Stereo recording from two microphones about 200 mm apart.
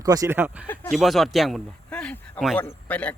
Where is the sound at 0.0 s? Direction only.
20° right (ahead or behind).